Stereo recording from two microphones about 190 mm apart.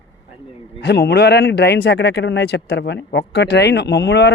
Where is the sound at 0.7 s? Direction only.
60° left (ahead or behind).